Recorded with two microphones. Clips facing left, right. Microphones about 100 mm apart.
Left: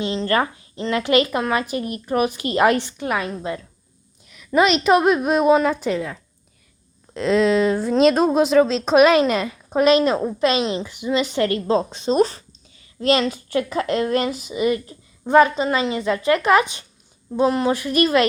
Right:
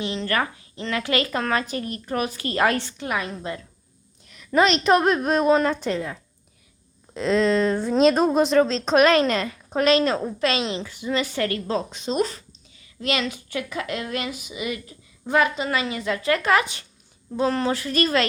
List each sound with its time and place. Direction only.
0.0 s speech: 25° left (ahead or behind)
4.3 s a woman's voice: 5° left (ahead or behind)